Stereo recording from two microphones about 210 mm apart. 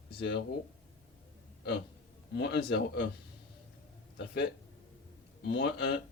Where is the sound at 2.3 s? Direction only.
50° left (ahead or behind).